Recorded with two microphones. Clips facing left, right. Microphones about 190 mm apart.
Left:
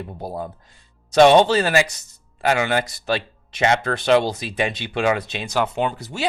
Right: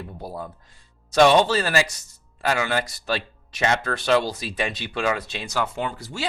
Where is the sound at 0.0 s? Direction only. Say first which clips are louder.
Left 4 dB; 20° left (ahead or behind).